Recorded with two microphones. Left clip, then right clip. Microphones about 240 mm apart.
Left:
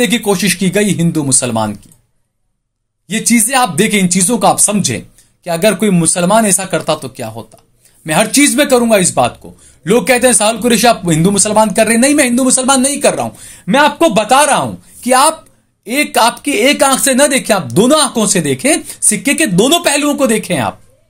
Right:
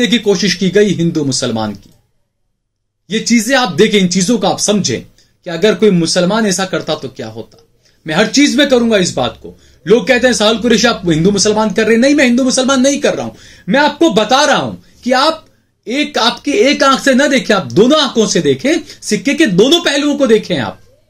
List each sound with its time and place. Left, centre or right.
0.0 s speech: left
3.1 s speech: left